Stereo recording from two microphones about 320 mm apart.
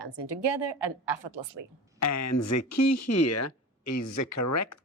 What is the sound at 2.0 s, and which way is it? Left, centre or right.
Speech, left.